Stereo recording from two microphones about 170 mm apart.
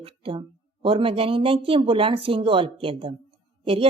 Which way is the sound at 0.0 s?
35° right (ahead or behind).